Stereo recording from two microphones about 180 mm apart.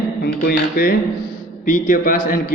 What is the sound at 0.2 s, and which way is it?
A man's voice, 55° left (ahead or behind).